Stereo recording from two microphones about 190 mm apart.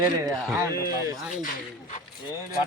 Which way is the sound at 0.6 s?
20° right (ahead or behind).